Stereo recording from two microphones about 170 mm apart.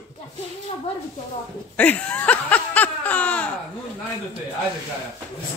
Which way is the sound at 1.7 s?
10° left (ahead or behind).